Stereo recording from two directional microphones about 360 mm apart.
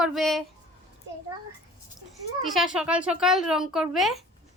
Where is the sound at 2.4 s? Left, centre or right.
Centre.